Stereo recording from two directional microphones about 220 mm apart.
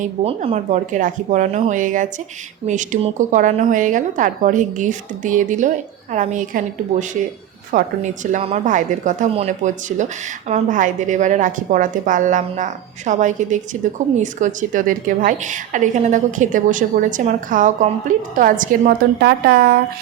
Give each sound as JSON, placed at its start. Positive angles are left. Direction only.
{"t": 0.0, "sound": "a woman's voice", "side_deg": -30}
{"t": 7.7, "sound": "a woman's voice", "side_deg": -35}